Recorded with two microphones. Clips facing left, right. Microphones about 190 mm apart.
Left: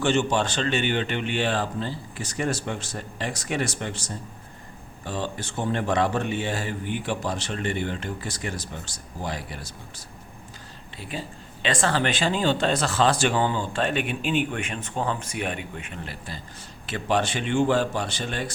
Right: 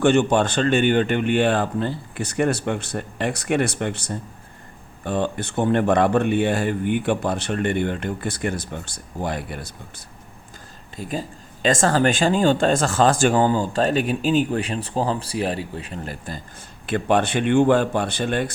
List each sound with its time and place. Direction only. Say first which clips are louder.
0.0 s speech: right 6 dB; 55° right (ahead or behind)
10.9 s speech: right 6 dB; 40° right (ahead or behind)